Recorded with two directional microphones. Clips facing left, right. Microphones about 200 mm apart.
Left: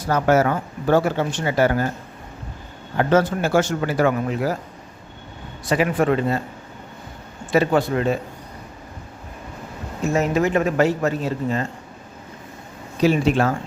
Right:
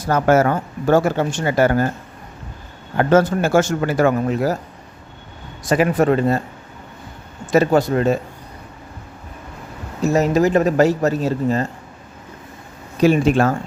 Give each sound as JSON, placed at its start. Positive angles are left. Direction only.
{"t": 0.1, "sound": "speech", "side_deg": -50}
{"t": 3.0, "sound": "speech", "side_deg": -50}
{"t": 5.6, "sound": "speech", "side_deg": -45}
{"t": 7.5, "sound": "speech", "side_deg": -40}
{"t": 10.0, "sound": "speech", "side_deg": -40}
{"t": 13.0, "sound": "speech", "side_deg": -50}